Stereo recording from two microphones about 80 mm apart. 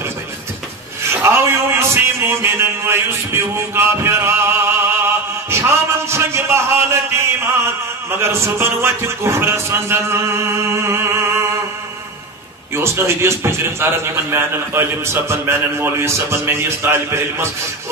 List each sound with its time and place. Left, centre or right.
1.2 s a sound: right
8.1 s speech: right
12.7 s speech: right